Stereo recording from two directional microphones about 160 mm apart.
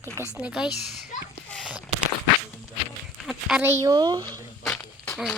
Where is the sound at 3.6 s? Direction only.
15° right (ahead or behind).